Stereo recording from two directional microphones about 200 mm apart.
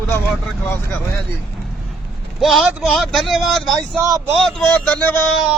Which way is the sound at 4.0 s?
15° right (ahead or behind).